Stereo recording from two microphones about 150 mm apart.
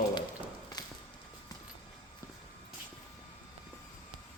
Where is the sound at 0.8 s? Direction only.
25° left (ahead or behind).